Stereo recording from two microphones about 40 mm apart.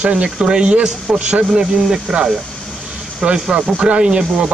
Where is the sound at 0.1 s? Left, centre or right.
Right.